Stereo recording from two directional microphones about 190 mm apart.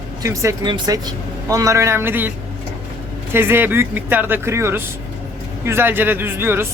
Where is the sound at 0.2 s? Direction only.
15° right (ahead or behind).